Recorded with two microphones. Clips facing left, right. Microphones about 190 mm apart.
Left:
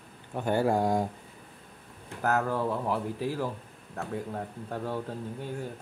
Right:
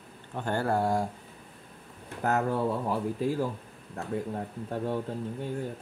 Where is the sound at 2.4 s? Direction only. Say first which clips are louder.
Right 1 dB; 15° right (ahead or behind).